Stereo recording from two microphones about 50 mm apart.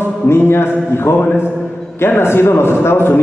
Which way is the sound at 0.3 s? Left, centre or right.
Left.